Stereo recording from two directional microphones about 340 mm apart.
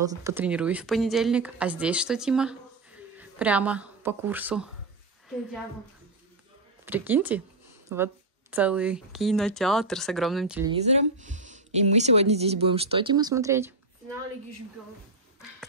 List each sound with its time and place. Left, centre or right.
0.2 s speech: centre
6.9 s speech: centre
10.7 s speech: centre